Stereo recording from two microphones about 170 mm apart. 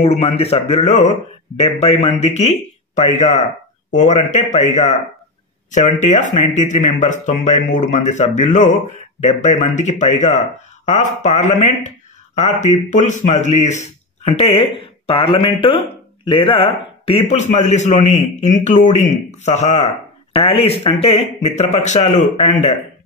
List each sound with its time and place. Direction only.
0.0 s a man's voice: 40° left (ahead or behind)